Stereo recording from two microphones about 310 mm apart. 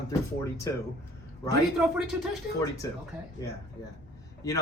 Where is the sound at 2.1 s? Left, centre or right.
Centre.